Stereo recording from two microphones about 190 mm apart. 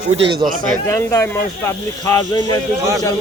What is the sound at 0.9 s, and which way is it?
Speech, 15° left (ahead or behind).